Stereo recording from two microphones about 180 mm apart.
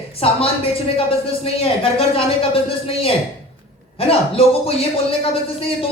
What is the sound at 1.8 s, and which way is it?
Speech, 30° left (ahead or behind).